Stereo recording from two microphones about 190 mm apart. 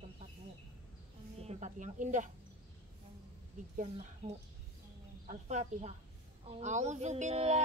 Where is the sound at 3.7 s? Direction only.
40° right (ahead or behind).